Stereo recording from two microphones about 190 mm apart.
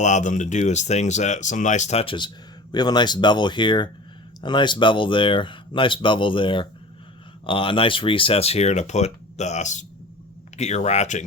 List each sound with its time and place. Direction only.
0.0 s speech: 40° left (ahead or behind)